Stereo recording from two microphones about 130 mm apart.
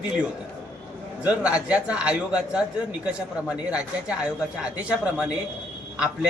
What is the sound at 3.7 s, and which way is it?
A man's voice, 10° right (ahead or behind).